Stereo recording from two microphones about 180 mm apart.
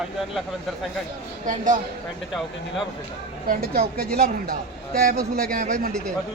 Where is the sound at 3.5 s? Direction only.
60° right (ahead or behind).